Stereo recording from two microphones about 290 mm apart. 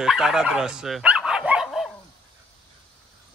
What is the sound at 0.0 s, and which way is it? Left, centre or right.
Dog, centre.